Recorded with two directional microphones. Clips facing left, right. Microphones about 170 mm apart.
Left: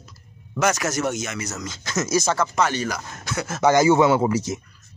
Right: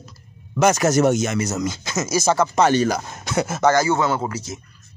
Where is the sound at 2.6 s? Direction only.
30° right (ahead or behind).